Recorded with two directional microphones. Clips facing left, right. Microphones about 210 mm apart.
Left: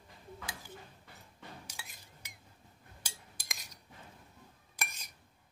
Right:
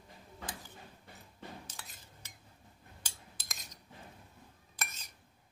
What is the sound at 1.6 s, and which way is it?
Chink, 10° left (ahead or behind).